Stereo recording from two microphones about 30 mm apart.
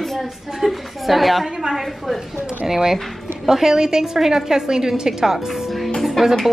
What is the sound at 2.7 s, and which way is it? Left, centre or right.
A woman's voice, centre.